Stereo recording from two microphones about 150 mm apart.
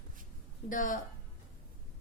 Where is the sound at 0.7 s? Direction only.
60° left (ahead or behind).